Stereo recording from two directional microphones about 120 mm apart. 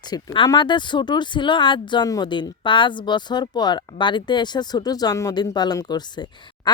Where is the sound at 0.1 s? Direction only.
35° left (ahead or behind).